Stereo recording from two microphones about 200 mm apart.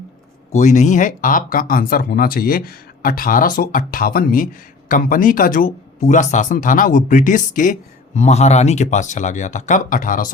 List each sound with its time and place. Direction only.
0.5 s speech: 40° left (ahead or behind)